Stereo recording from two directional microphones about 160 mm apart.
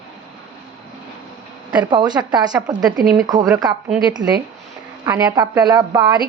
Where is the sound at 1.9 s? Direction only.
25° right (ahead or behind).